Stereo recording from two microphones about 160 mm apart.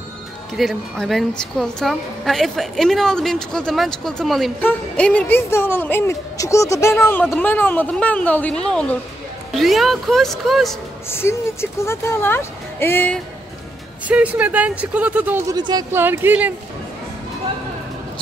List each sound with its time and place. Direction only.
0.6 s a woman's voice: centre (ahead or behind)
11.1 s speech: 15° left (ahead or behind)
14.0 s speech: 10° right (ahead or behind)
15.5 s speech: 25° right (ahead or behind)
15.9 s speech: 15° right (ahead or behind)